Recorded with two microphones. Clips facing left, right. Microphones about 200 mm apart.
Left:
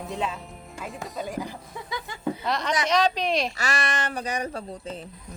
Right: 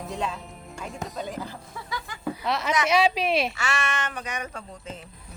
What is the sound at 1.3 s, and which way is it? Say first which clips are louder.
Speech: left 2 dB; 15° left (ahead or behind).